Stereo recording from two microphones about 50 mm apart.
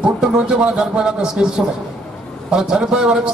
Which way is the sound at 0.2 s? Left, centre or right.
Centre.